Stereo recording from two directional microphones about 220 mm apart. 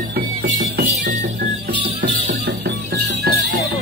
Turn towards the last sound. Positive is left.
turn(degrees=-45)  # may be behind; listen again after turning